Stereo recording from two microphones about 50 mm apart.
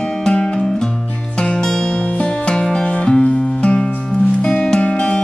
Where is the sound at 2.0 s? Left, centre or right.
Left.